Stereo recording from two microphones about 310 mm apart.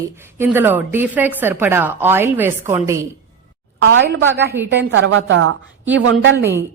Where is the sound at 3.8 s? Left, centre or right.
Right.